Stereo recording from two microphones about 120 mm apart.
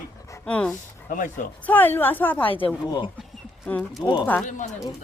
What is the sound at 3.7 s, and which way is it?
Speech, 10° left (ahead or behind).